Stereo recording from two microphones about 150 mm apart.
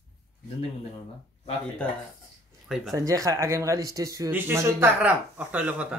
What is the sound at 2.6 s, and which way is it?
Speech, centre (ahead or behind).